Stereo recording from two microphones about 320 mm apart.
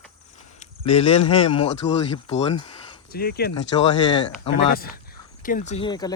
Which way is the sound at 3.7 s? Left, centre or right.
Centre.